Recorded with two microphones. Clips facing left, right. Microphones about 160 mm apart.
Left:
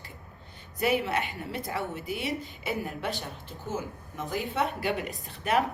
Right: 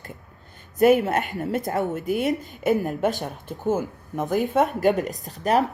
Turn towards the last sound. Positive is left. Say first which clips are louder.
# right 5 dB
turn(degrees=-40)  # may be behind; listen again after turning